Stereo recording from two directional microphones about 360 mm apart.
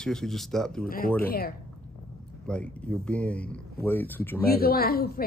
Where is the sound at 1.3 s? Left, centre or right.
Left.